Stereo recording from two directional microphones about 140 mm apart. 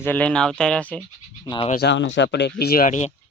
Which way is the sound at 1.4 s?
30° left (ahead or behind).